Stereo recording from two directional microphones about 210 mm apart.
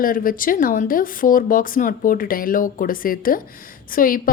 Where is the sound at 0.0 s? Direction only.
40° left (ahead or behind).